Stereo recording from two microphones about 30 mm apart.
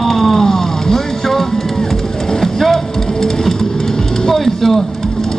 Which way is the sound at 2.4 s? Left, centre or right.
Centre.